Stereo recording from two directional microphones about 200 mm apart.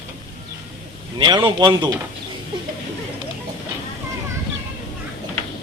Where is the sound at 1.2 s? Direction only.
25° right (ahead or behind).